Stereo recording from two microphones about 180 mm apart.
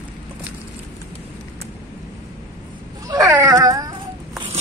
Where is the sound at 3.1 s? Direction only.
20° right (ahead or behind).